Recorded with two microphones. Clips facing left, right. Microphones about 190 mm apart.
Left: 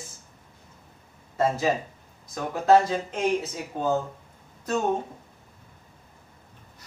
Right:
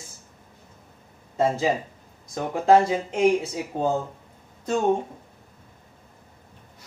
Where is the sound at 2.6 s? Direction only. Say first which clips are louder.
Right 1 dB; 10° right (ahead or behind).